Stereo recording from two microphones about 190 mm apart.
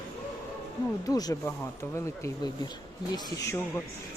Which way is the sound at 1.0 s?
20° left (ahead or behind).